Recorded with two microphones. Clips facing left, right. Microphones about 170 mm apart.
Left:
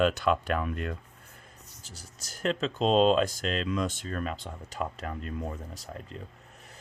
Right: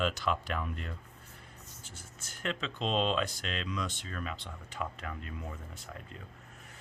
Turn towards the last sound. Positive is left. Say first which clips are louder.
# left 5 dB
turn(degrees=35)  # may be behind; listen again after turning